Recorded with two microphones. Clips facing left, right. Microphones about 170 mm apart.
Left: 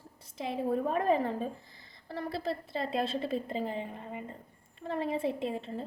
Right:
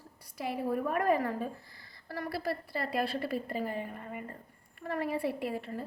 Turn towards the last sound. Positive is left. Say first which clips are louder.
# left 1 dB
turn(degrees=20)  # may be behind; listen again after turning